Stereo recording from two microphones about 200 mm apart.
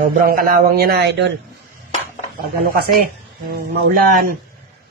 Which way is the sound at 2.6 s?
50° right (ahead or behind).